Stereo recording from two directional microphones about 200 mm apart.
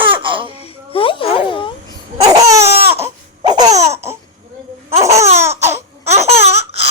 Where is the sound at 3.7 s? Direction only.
30° right (ahead or behind).